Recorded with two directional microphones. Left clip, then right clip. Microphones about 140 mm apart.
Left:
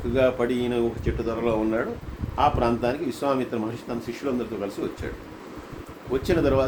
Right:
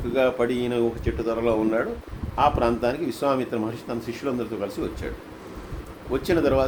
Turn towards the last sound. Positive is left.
turn(degrees=-55)  # may be behind; listen again after turning